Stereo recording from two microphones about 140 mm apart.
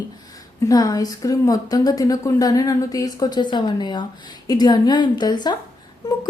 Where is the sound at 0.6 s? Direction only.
25° left (ahead or behind).